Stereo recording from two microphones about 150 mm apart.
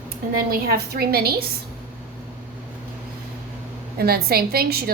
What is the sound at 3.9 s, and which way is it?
Speech, 90° right.